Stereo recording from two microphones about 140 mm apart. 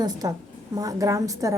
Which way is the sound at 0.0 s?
25° right (ahead or behind).